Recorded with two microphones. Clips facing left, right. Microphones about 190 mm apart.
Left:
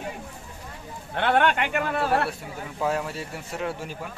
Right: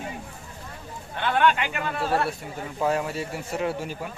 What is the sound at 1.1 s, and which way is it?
A man's voice, 65° left (ahead or behind).